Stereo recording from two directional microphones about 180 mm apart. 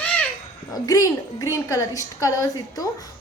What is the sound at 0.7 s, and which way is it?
A woman's voice, 20° left (ahead or behind).